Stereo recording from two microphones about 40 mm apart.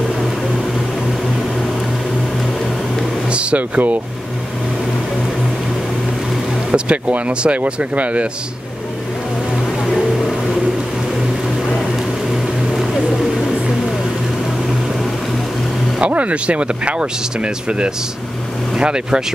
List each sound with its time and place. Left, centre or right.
3.3 s a sound: right
6.7 s speech: right
16.1 s speech: right